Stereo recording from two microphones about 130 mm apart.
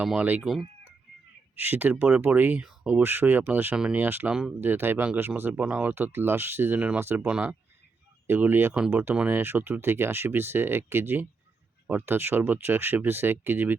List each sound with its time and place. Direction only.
0.0 s speech: 10° right (ahead or behind)
0.4 s speech: centre (ahead or behind)
1.5 s speech: 15° right (ahead or behind)